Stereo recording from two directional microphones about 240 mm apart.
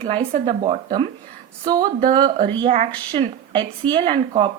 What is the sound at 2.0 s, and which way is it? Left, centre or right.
Speech, right.